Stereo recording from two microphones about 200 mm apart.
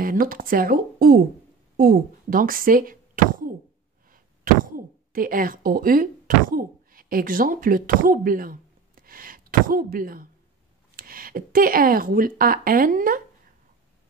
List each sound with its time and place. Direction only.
0.0 s speech: 45° right (ahead or behind)
4.6 s speech: 45° right (ahead or behind)